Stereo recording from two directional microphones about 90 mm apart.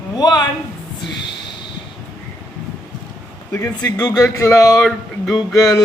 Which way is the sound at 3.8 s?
40° left (ahead or behind).